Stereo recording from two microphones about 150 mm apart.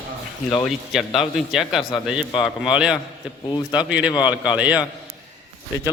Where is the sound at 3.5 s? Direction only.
30° left (ahead or behind).